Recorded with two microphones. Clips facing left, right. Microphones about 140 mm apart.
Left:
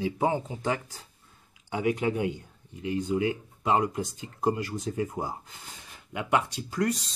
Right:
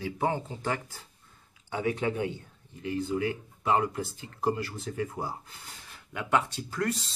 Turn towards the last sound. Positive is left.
turn(degrees=15)  # may be behind; listen again after turning